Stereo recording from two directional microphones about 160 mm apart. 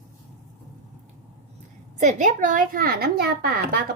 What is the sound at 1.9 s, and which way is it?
A child's voice, 50° right (ahead or behind).